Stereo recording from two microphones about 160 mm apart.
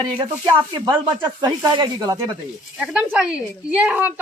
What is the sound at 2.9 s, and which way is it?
Speech, 5° right (ahead or behind).